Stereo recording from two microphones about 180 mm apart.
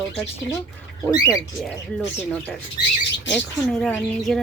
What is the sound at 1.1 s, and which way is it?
Speech, 20° left (ahead or behind).